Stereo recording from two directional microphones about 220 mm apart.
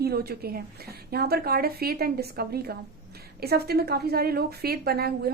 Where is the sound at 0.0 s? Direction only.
45° right (ahead or behind).